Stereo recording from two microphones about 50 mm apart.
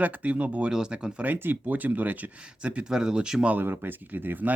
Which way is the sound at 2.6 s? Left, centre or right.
Right.